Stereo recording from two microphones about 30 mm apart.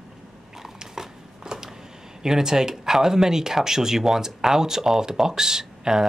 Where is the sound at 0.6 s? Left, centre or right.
Centre.